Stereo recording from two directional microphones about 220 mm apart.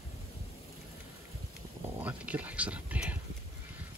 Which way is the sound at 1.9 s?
5° right (ahead or behind).